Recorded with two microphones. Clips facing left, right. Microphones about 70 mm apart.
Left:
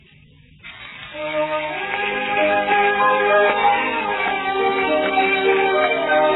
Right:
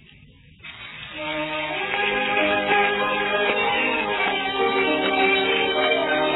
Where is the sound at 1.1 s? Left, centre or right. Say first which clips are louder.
Left 6 dB; left.